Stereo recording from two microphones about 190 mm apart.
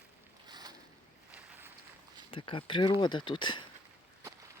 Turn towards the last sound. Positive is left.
turn(degrees=25)  # may be behind; listen again after turning